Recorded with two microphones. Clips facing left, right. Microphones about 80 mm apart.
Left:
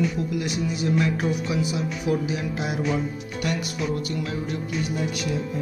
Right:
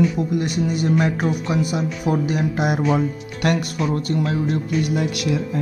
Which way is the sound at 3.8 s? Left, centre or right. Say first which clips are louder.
Right 6 dB; right.